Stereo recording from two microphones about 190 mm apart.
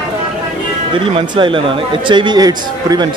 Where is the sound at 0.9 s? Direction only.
25° right (ahead or behind).